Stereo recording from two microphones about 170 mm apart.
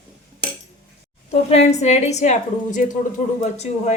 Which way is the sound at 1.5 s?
40° left (ahead or behind).